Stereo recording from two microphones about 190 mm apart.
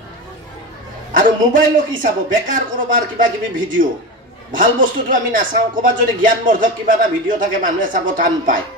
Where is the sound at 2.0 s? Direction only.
45° right (ahead or behind).